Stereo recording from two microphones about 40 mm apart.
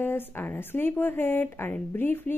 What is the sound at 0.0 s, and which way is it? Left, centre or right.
Speech, left.